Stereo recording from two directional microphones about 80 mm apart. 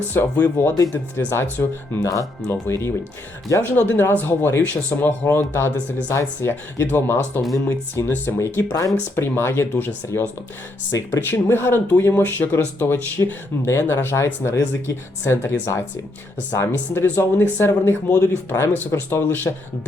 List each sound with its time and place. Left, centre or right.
0.1 s speech: left
2.5 s speech: left